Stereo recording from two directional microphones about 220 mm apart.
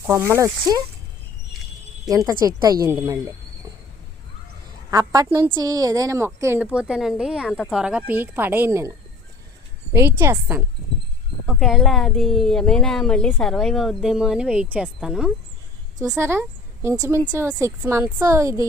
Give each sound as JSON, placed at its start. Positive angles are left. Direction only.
{"t": 0.1, "sound": "a woman's voice", "side_deg": -10}
{"t": 2.0, "sound": "a woman's voice", "side_deg": -15}
{"t": 4.9, "sound": "a woman's voice", "side_deg": -15}